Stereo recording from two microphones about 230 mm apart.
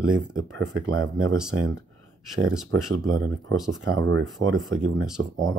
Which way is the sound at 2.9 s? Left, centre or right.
Right.